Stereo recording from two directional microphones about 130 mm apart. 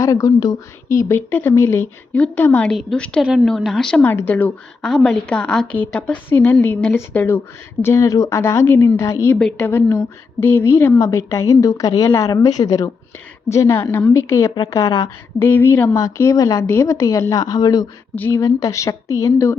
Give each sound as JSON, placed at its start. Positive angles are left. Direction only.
{"t": 0.0, "sound": "a woman's voice", "side_deg": 25}
{"t": 4.0, "sound": "a woman's voice", "side_deg": 15}
{"t": 4.8, "sound": "a woman's voice", "side_deg": 5}
{"t": 18.1, "sound": "a woman's voice", "side_deg": 15}